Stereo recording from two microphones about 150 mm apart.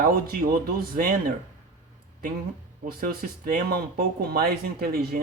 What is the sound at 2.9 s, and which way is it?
Speech, 85° right.